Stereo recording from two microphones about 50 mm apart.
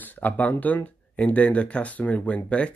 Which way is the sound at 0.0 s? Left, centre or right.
Left.